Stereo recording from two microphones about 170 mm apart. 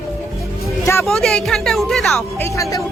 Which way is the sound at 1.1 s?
5° left (ahead or behind).